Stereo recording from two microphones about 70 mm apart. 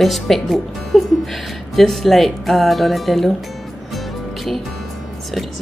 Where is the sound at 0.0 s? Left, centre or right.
Centre.